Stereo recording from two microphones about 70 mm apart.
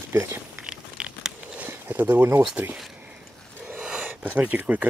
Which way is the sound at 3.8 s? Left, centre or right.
Centre.